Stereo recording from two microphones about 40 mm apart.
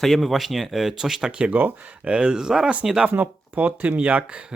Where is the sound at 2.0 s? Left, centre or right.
Right.